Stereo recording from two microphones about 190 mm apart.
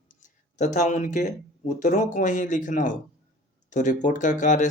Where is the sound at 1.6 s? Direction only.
40° left (ahead or behind).